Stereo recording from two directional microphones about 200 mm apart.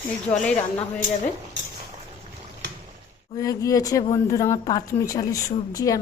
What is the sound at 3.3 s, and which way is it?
A woman's voice, 15° left (ahead or behind).